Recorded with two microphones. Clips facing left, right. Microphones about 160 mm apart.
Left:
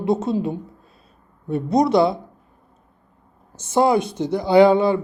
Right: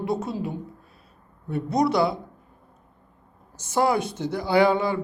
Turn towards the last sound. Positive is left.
turn(degrees=20)  # may be behind; listen again after turning